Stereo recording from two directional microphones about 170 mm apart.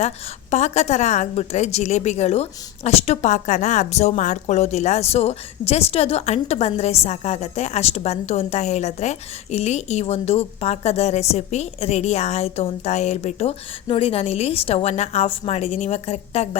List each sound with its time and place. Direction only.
0.5 s a woman's voice: 40° left (ahead or behind)